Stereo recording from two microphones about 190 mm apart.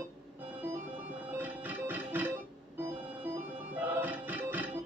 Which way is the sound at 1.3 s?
10° right (ahead or behind).